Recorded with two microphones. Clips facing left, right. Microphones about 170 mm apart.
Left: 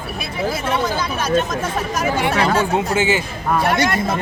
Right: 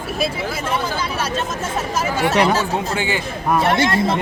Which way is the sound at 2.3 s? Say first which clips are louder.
Right 4 dB; 15° right (ahead or behind).